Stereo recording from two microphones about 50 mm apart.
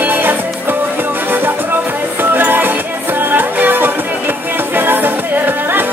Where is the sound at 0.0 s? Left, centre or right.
Right.